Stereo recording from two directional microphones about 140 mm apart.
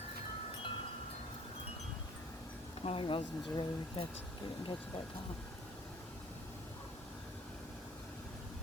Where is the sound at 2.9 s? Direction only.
40° left (ahead or behind).